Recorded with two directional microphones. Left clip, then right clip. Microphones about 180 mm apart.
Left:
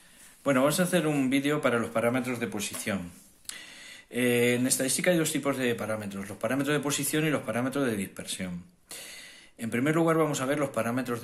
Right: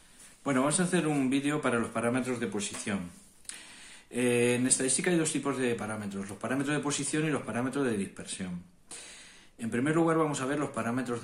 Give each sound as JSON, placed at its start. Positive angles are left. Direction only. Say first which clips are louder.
{"t": 0.4, "sound": "speech", "louder": "left 4 dB", "side_deg": 25}
{"t": 4.1, "sound": "speech", "louder": "left 2 dB", "side_deg": 25}